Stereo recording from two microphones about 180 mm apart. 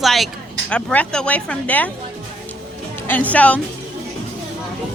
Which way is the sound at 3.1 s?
10° left (ahead or behind).